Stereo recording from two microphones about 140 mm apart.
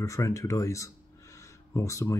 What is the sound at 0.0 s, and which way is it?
Speech, 25° left (ahead or behind).